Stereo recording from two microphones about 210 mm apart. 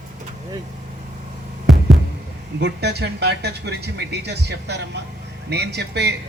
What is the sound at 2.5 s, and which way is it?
Speech, 50° right (ahead or behind).